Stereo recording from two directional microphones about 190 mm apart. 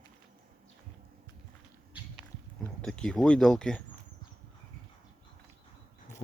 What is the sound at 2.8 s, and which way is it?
Speech, 5° left (ahead or behind).